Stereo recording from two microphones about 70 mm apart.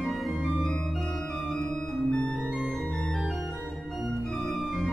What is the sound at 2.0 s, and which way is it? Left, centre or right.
Organ, centre.